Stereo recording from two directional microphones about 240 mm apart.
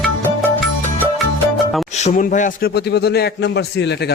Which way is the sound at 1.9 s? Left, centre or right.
Left.